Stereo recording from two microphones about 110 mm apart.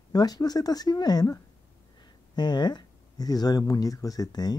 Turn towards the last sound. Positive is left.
turn(degrees=35)  # may be behind; listen again after turning